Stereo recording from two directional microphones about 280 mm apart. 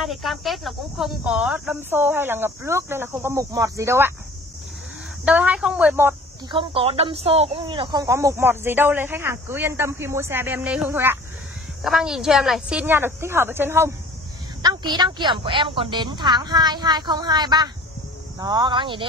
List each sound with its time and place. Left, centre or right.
0.0 s speech: centre
5.2 s a woman's voice: centre